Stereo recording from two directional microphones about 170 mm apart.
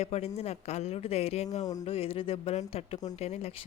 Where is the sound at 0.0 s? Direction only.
40° left (ahead or behind).